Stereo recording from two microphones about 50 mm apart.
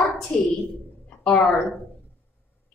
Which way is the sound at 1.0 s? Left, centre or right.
Left.